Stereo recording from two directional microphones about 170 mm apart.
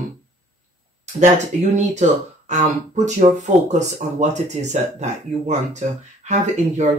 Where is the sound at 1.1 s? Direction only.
45° right (ahead or behind).